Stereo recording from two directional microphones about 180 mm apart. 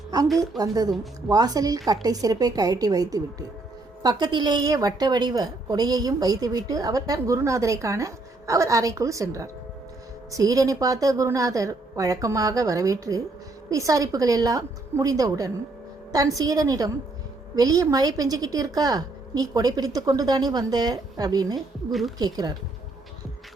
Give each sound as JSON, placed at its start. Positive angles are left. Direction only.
{"t": 0.3, "sound": "a woman's voice", "side_deg": -20}